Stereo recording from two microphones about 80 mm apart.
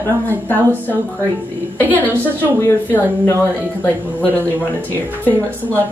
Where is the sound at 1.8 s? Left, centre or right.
Left.